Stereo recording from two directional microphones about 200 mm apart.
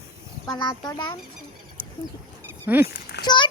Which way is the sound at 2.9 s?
55° left (ahead or behind).